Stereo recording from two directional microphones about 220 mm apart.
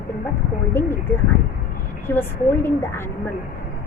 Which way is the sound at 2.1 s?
10° left (ahead or behind).